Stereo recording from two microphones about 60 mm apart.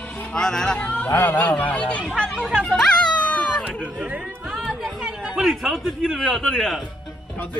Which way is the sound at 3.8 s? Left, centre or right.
Centre.